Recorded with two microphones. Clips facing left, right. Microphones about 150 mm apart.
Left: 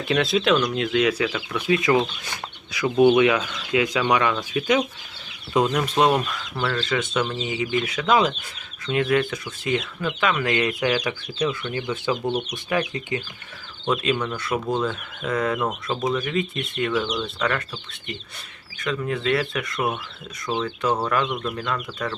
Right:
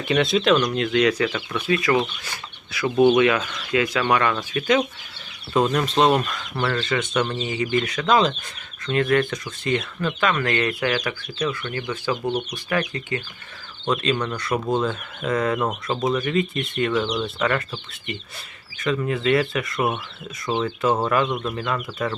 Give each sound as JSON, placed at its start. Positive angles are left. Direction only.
{"t": 0.0, "sound": "speech", "side_deg": 0}
{"t": 1.6, "sound": "speech", "side_deg": 20}
{"t": 13.8, "sound": "speech", "side_deg": 5}
{"t": 18.8, "sound": "speech", "side_deg": 0}
{"t": 21.2, "sound": "speech", "side_deg": -20}
{"t": 21.5, "sound": "speech", "side_deg": -5}